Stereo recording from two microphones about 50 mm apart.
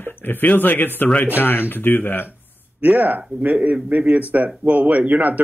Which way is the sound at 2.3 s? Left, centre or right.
Right.